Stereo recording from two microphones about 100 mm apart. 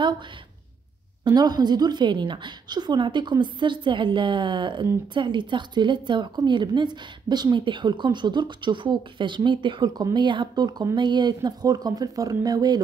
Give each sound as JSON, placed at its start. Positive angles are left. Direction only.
{"t": 1.2, "sound": "a woman's voice", "side_deg": -40}